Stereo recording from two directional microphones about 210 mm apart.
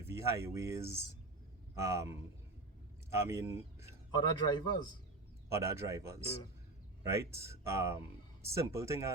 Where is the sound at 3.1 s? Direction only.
15° right (ahead or behind).